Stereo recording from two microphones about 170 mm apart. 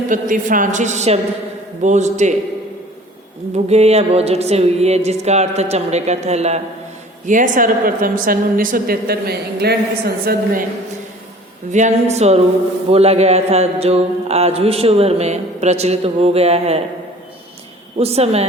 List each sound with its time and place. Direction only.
0.1 s a woman's voice: 50° right (ahead or behind)
3.5 s mantra: 40° right (ahead or behind)
7.3 s a woman's voice: 50° right (ahead or behind)
11.7 s mantra: 45° right (ahead or behind)
18.0 s mantra: 35° right (ahead or behind)